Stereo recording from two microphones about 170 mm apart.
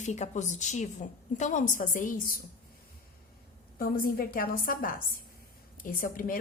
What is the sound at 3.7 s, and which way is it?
A woman's voice, 55° left (ahead or behind).